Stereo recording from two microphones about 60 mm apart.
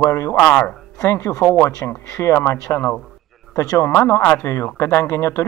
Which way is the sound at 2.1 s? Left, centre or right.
Left.